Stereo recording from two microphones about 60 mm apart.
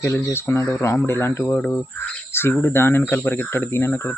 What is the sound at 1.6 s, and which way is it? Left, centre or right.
Speech, centre.